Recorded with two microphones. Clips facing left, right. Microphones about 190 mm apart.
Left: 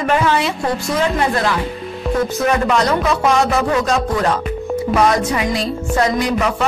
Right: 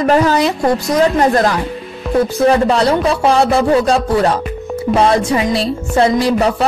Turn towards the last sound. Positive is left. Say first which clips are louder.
# right 4 dB
turn(degrees=-30)  # may be behind; listen again after turning